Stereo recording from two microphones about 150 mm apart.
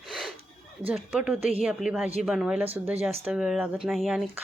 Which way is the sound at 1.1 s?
5° right (ahead or behind).